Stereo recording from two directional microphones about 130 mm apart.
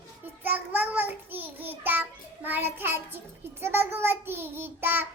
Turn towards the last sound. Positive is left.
turn(degrees=-15)  # may be behind; listen again after turning